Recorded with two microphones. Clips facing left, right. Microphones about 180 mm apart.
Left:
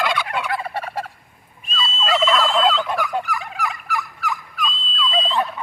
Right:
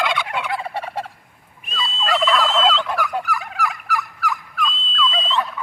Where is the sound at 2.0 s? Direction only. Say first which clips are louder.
Left 1 dB; 15° left (ahead or behind).